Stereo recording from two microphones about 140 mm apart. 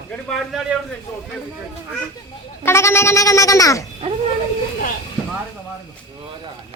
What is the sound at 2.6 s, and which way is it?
Speech, 20° left (ahead or behind).